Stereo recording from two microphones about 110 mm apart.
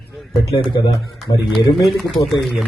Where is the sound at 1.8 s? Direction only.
Centre (ahead or behind).